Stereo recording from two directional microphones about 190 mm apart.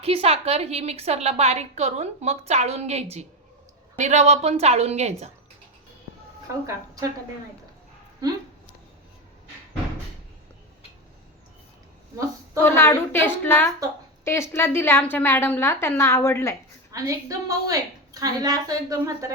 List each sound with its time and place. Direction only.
0.0 s a woman's voice: 30° right (ahead or behind)
12.6 s a woman's voice: 15° left (ahead or behind)
16.9 s a woman's voice: 15° right (ahead or behind)